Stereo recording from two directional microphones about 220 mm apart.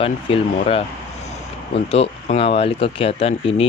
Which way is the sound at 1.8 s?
25° left (ahead or behind).